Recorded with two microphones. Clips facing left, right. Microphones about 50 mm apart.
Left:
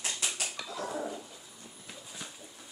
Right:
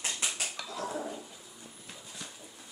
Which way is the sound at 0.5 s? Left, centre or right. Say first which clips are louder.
Even; centre.